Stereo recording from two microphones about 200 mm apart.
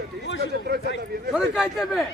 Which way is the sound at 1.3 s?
Centre (ahead or behind).